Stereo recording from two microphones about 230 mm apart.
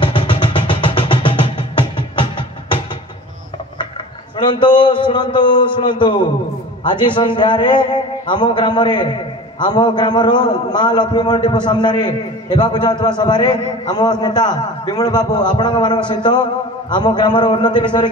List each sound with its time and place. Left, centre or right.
0.0 s music: left
4.5 s a man's voice: centre